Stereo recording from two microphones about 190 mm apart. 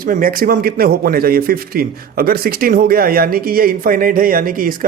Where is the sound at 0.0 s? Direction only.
50° right (ahead or behind).